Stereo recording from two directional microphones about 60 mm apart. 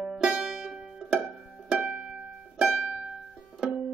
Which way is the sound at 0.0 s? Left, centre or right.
Centre.